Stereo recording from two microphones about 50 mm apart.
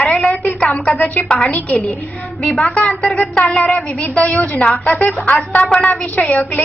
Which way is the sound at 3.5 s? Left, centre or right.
Centre.